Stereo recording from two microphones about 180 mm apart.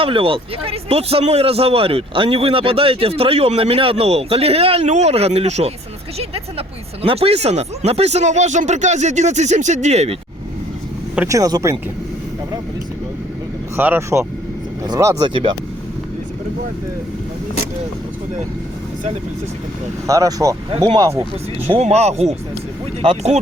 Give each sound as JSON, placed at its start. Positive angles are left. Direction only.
{"t": 0.0, "sound": "a man's voice", "side_deg": -30}
{"t": 11.3, "sound": "speech", "side_deg": -20}
{"t": 13.7, "sound": "speech", "side_deg": -10}
{"t": 15.3, "sound": "speech", "side_deg": -30}
{"t": 20.1, "sound": "speech", "side_deg": -20}
{"t": 21.7, "sound": "a man's voice", "side_deg": -35}